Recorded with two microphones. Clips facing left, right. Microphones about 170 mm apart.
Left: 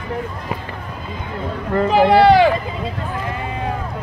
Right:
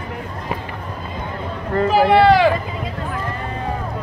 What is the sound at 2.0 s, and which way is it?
Speech, 30° left (ahead or behind).